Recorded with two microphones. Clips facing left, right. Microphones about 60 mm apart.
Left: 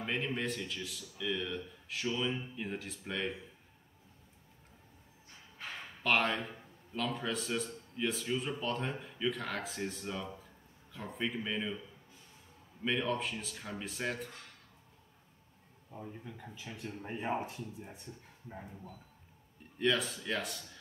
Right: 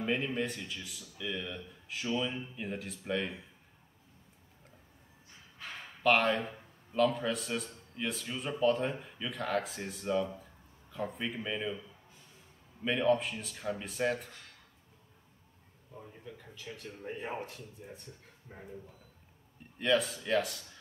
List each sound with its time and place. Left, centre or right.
0.0 s a man's voice: centre
6.0 s a man's voice: centre
12.8 s a man's voice: centre
15.9 s speech: centre
19.8 s a man's voice: centre